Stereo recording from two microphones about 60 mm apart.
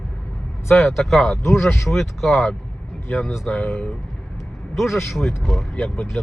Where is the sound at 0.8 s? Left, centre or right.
Centre.